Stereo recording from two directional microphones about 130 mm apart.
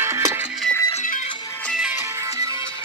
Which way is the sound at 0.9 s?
75° left (ahead or behind).